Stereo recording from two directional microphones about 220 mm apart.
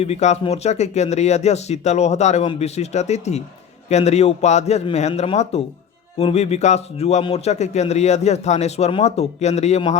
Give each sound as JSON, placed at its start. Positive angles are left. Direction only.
{"t": 0.0, "sound": "a man's voice", "side_deg": 30}